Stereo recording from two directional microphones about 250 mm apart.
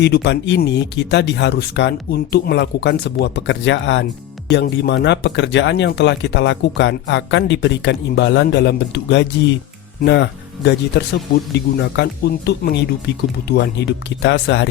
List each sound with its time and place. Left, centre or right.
0.0 s speech: left